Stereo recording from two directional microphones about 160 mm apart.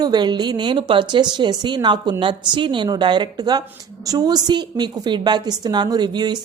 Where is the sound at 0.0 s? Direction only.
25° right (ahead or behind).